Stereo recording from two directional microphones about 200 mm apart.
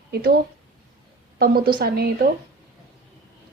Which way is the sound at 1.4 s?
50° right (ahead or behind).